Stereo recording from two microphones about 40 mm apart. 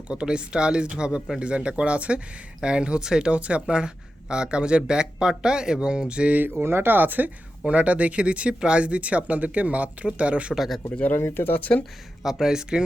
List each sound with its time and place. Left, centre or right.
0.1 s speech: right
6.6 s speech: right
7.7 s speech: right
10.5 s speech: centre
11.0 s speech: left
12.2 s speech: centre